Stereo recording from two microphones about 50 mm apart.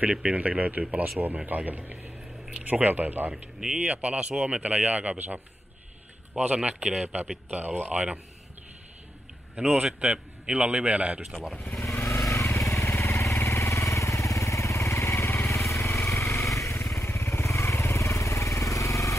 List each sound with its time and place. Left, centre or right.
0.0 s speech: right
3.6 s speech: right
6.3 s speech: right
7.5 s speech: right
9.9 s speech: centre
11.9 s vehicle: left
12.3 s motorcycle: left
12.8 s vehicle: left
15.8 s lawn mower: left
16.9 s vehicle: left